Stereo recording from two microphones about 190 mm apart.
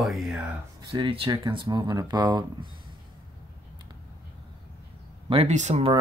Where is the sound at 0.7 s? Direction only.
25° right (ahead or behind).